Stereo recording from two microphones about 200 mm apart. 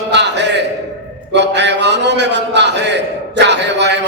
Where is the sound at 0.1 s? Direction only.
60° right (ahead or behind).